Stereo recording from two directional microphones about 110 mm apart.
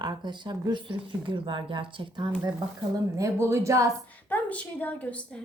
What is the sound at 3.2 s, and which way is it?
Speech, 25° right (ahead or behind).